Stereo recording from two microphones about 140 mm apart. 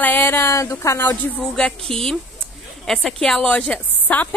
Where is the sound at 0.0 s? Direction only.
15° left (ahead or behind).